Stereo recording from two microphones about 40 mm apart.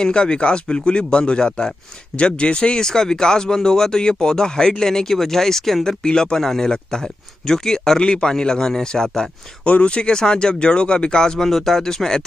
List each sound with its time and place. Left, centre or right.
0.0 s a man's voice: left
5.9 s a man's voice: centre
9.7 s speech: left
11.4 s a man's voice: centre